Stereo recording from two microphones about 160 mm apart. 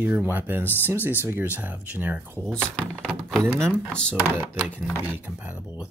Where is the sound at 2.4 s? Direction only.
5° left (ahead or behind).